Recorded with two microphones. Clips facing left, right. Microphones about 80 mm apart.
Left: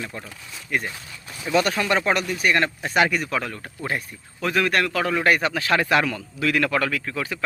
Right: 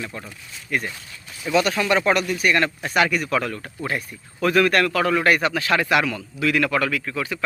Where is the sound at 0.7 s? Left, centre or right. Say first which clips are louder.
Right 1 dB; centre.